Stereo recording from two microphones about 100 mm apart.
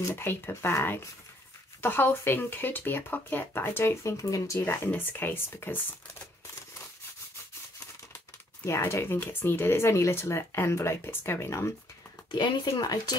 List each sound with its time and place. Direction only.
0.1 s speech: 20° left (ahead or behind)
8.6 s speech: 25° left (ahead or behind)
12.3 s speech: 50° left (ahead or behind)